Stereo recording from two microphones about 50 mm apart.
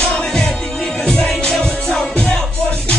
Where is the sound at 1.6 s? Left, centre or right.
Centre.